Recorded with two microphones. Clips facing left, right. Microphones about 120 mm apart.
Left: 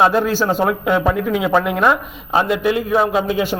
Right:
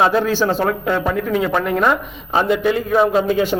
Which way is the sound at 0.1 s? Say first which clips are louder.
Even; 5° left (ahead or behind).